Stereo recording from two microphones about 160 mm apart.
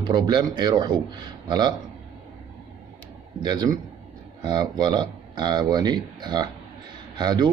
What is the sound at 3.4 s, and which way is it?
Speech, 25° right (ahead or behind).